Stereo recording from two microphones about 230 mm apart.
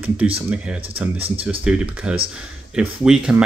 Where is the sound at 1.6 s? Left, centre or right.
Centre.